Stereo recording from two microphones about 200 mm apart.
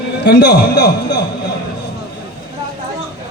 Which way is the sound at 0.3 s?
55° left (ahead or behind).